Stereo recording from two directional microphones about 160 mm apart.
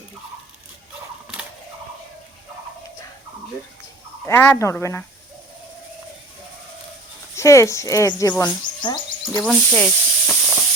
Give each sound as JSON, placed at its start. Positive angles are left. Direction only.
{"t": 4.3, "sound": "speech", "side_deg": 15}
{"t": 7.3, "sound": "a woman's voice", "side_deg": 20}
{"t": 9.4, "sound": "hiss", "side_deg": 5}